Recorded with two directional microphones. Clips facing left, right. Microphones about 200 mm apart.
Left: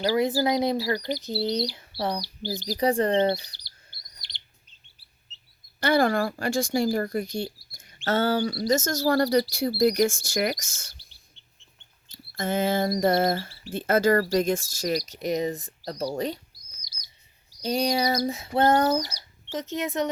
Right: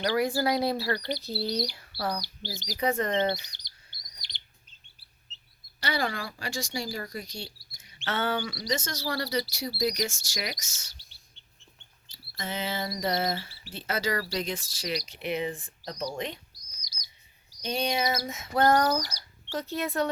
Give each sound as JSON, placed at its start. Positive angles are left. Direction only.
{"t": 0.0, "sound": "speech", "side_deg": 25}
{"t": 2.5, "sound": "speech", "side_deg": 35}
{"t": 5.8, "sound": "speech", "side_deg": 50}
{"t": 12.0, "sound": "speech", "side_deg": 50}
{"t": 17.6, "sound": "speech", "side_deg": 35}